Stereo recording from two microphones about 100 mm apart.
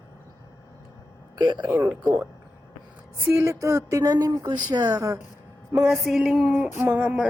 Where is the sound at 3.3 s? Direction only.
30° right (ahead or behind).